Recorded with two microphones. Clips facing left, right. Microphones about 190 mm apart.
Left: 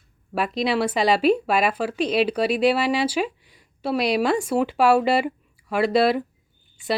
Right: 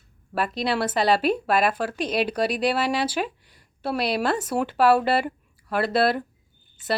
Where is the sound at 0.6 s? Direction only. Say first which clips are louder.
Left 2 dB; 10° left (ahead or behind).